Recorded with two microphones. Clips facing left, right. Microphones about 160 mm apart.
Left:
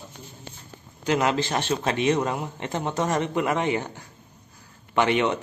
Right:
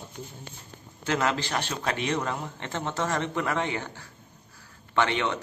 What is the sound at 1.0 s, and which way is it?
A man's voice, 15° left (ahead or behind).